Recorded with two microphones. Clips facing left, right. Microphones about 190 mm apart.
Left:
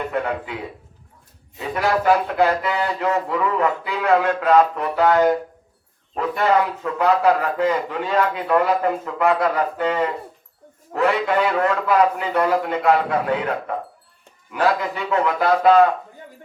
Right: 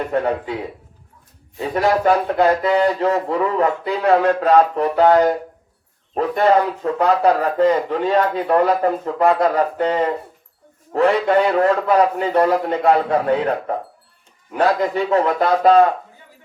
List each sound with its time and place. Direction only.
0.1 s speech: 35° right (ahead or behind)
1.5 s speech: 35° right (ahead or behind)
6.8 s speech: 35° right (ahead or behind)